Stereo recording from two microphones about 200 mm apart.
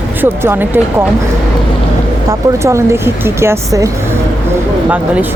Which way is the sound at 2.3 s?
15° right (ahead or behind).